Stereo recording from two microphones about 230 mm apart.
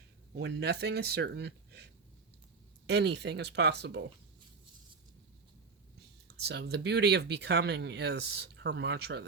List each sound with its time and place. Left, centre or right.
0.3 s speech: right
6.4 s speech: right